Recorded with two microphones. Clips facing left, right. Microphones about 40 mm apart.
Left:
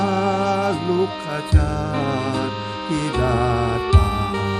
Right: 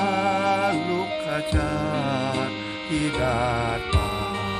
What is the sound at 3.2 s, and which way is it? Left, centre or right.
Music, right.